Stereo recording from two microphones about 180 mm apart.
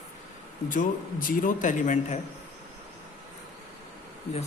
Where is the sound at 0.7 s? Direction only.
50° left (ahead or behind).